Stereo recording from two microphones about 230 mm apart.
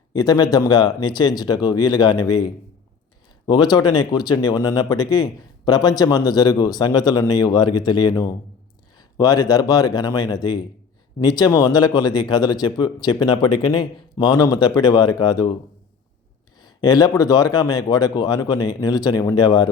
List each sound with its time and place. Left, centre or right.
0.1 s speech: centre
16.6 s speech: centre